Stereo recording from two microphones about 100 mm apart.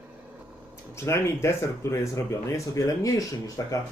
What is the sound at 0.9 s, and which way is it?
Speech, 30° left (ahead or behind).